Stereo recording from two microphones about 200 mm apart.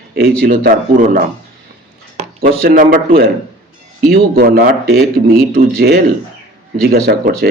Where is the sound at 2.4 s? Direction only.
45° right (ahead or behind).